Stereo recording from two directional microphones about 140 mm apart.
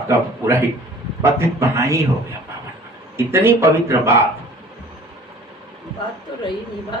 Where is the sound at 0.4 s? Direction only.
15° right (ahead or behind).